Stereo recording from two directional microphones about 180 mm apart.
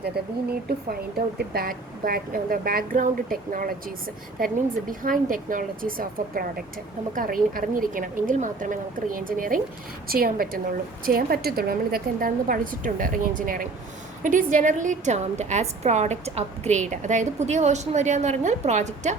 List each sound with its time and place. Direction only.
1.4 s a woman's voice: 55° right (ahead or behind); by 19.1 s 40° right (ahead or behind)